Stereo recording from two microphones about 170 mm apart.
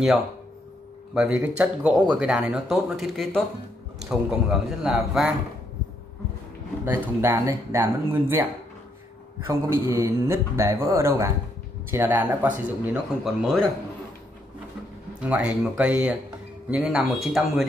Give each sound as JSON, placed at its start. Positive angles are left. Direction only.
{"t": 1.1, "sound": "a man's voice", "side_deg": -5}
{"t": 6.8, "sound": "a man's voice", "side_deg": -15}
{"t": 15.1, "sound": "a man's voice", "side_deg": -5}